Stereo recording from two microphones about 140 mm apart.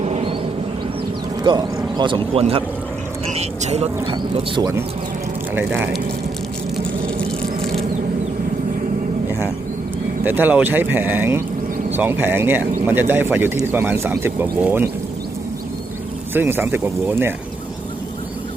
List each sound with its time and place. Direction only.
0.0 s a sound: 50° right (ahead or behind)
1.5 s speech: 35° right (ahead or behind); by 4.1 s 50° right (ahead or behind)
4.1 s speech: 30° right (ahead or behind)
5.5 s speech: 15° right (ahead or behind)
10.2 s speech: 15° right (ahead or behind)
16.3 s speech: 15° right (ahead or behind)